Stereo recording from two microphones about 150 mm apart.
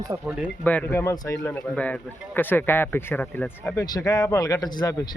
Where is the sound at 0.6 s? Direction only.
10° left (ahead or behind).